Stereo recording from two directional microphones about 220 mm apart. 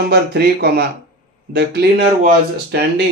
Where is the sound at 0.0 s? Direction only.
45° right (ahead or behind).